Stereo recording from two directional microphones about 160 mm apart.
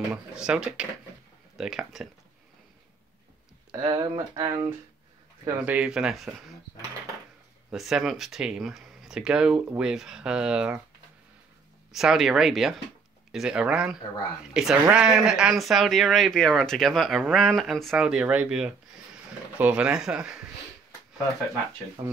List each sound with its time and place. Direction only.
0.1 s speech: 5° right (ahead or behind)
3.7 s speech: 30° right (ahead or behind)
5.6 s speech: 10° right (ahead or behind)
7.7 s speech: centre (ahead or behind)
11.9 s speech: centre (ahead or behind)
22.0 s speech: 30° right (ahead or behind)